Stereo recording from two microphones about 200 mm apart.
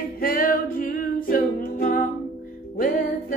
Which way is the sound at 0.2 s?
45° left (ahead or behind).